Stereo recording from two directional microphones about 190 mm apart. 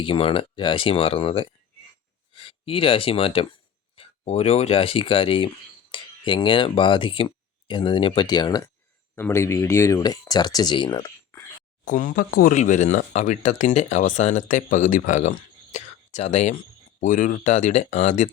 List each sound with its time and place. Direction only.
0.0 s speech: 30° left (ahead or behind)
11.9 s speech: 45° left (ahead or behind)